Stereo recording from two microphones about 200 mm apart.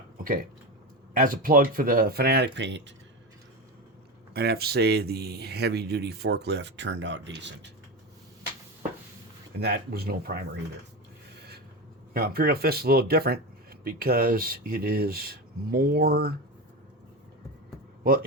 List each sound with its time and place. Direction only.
1.1 s speech: 45° right (ahead or behind); by 2.9 s 65° right (ahead or behind)
4.4 s speech: 50° right (ahead or behind)
9.6 s speech: 55° right (ahead or behind)
12.1 s speech: 50° right (ahead or behind)